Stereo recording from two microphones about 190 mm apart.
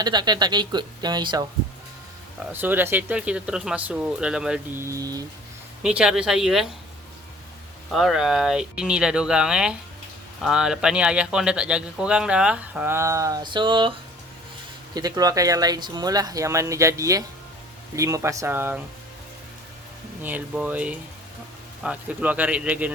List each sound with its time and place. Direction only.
0.0 s speech: 20° right (ahead or behind)
2.4 s speech: 10° right (ahead or behind)
5.8 s speech: 5° right (ahead or behind)
7.9 s speech: centre (ahead or behind); by 13.9 s 25° right (ahead or behind)
14.9 s speech: 20° right (ahead or behind)
20.2 s speech: 10° right (ahead or behind)